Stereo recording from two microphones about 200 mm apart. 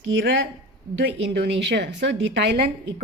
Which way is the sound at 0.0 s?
65° right (ahead or behind).